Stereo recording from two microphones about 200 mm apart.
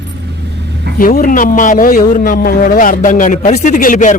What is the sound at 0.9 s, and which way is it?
A man's voice, 45° left (ahead or behind).